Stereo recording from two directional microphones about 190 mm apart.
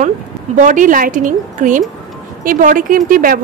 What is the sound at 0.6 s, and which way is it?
A woman's voice, 40° right (ahead or behind).